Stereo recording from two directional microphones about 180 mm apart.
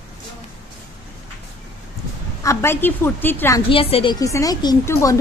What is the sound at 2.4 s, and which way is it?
A woman's voice, 15° left (ahead or behind).